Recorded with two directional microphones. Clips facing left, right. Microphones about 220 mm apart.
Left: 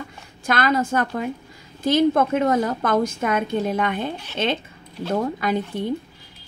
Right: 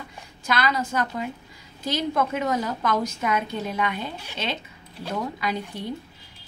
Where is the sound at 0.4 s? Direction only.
50° left (ahead or behind).